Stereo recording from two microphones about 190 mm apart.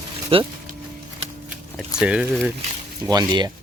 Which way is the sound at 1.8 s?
5° right (ahead or behind).